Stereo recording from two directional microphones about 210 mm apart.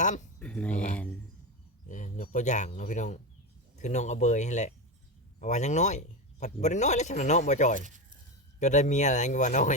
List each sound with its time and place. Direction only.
0.0 s speech: 35° left (ahead or behind)
0.3 s speech: 5° left (ahead or behind)
1.9 s speech: 40° left (ahead or behind)
7.8 s speech: 35° right (ahead or behind)
8.5 s speech: 35° left (ahead or behind)